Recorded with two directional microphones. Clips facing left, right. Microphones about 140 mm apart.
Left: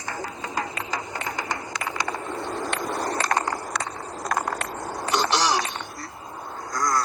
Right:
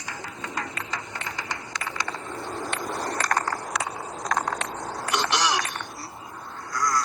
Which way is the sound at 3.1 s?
25° left (ahead or behind).